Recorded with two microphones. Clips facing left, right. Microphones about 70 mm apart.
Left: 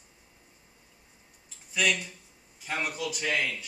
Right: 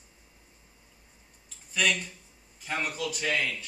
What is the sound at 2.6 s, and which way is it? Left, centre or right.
Speech, centre.